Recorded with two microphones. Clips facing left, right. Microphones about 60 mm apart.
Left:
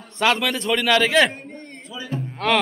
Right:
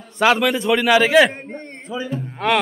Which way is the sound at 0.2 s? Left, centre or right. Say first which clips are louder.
Right 4 dB; centre.